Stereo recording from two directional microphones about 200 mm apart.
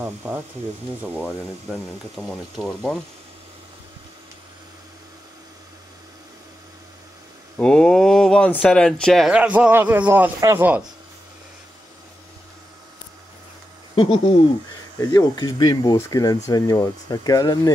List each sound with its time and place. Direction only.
0.0 s speech: 10° right (ahead or behind)
7.5 s speech: 5° left (ahead or behind)
13.9 s speech: 25° left (ahead or behind)